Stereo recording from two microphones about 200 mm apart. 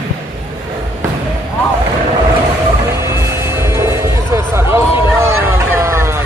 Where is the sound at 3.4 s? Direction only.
15° right (ahead or behind).